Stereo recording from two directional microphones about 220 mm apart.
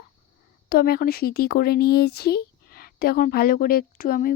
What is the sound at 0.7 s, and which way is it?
Speech, 40° left (ahead or behind).